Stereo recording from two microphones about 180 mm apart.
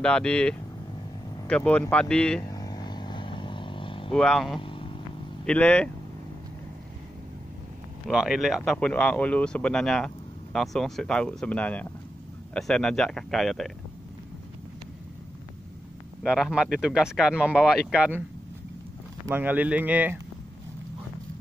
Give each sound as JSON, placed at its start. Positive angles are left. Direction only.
{"t": 0.0, "sound": "speech", "side_deg": 5}
{"t": 2.5, "sound": "vehicle", "side_deg": 20}
{"t": 4.1, "sound": "speech", "side_deg": 0}
{"t": 4.6, "sound": "vehicle", "side_deg": 30}
{"t": 5.5, "sound": "speech", "side_deg": 5}
{"t": 8.1, "sound": "speech", "side_deg": -5}
{"t": 16.2, "sound": "speech", "side_deg": 0}
{"t": 19.2, "sound": "speech", "side_deg": -10}